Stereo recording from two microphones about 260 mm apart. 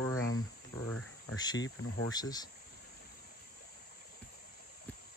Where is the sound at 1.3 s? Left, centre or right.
Centre.